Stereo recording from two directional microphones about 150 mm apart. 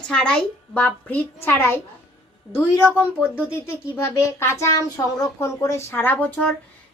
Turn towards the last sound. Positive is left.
turn(degrees=10)  # may be behind; listen again after turning